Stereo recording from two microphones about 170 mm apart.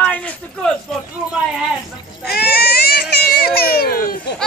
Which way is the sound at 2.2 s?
70° left (ahead or behind).